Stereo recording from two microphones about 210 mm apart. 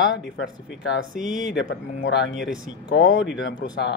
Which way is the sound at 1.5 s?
55° left (ahead or behind).